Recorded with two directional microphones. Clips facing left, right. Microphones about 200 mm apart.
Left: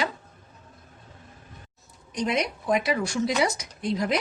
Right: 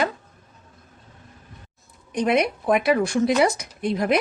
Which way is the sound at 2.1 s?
55° right (ahead or behind).